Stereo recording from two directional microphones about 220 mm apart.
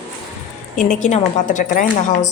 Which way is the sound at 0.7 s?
35° left (ahead or behind).